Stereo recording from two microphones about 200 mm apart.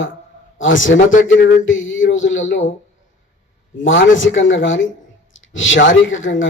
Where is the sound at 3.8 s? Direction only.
70° left (ahead or behind).